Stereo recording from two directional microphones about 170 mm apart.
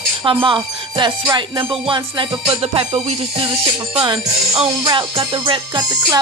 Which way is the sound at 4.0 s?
30° right (ahead or behind).